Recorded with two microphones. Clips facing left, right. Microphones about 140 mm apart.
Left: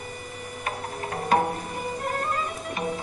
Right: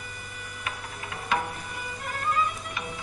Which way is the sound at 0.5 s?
40° left (ahead or behind).